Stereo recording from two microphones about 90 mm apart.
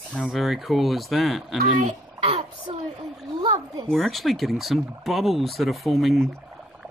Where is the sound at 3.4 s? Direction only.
90° right.